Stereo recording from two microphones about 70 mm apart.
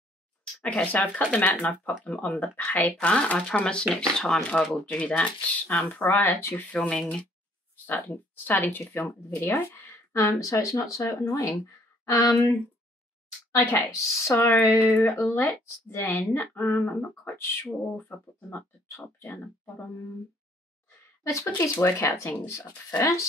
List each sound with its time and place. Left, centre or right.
0.7 s speech: centre
7.0 s speech: centre
7.7 s speech: left
13.5 s speech: left
15.0 s speech: left
21.2 s speech: left
21.5 s speech: left